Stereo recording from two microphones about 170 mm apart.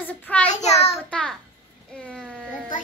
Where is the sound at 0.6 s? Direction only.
40° left (ahead or behind).